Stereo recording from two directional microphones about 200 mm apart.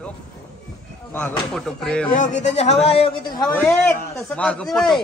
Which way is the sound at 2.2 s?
35° left (ahead or behind).